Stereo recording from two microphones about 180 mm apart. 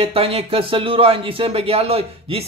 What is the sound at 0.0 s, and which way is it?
Speech, 30° right (ahead or behind).